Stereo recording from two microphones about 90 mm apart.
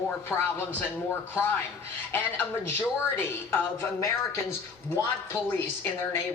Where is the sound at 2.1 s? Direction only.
20° left (ahead or behind).